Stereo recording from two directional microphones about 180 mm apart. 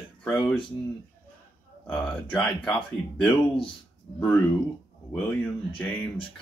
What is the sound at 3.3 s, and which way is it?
Speech, 30° left (ahead or behind).